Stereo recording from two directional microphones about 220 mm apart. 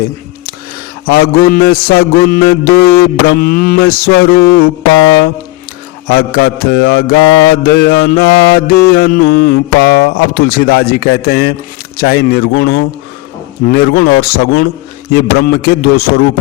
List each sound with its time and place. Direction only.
1.0 s mantra: 45° left (ahead or behind)
6.1 s mantra: 45° left (ahead or behind)